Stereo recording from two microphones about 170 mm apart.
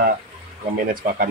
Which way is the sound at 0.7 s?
55° right (ahead or behind).